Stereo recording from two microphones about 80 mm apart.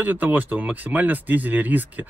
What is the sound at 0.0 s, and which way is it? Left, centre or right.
Speech, right.